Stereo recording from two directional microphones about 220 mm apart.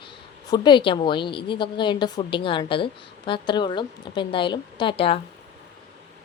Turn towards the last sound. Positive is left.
turn(degrees=25)  # may be behind; listen again after turning